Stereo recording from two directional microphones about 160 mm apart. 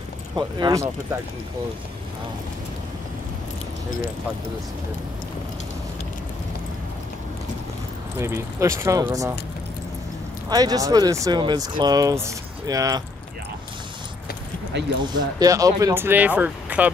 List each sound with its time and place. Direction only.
0.4 s speech: 25° right (ahead or behind)
8.2 s speech: 20° right (ahead or behind)
10.5 s speech: 25° right (ahead or behind)
15.1 s speech: 25° right (ahead or behind)